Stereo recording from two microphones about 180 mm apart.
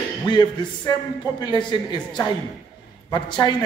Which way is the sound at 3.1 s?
25° left (ahead or behind).